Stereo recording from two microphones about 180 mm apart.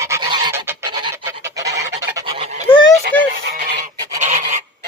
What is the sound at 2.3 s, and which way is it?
Honk, 35° right (ahead or behind).